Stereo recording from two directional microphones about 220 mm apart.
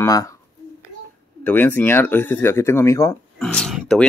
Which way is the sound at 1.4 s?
10° left (ahead or behind).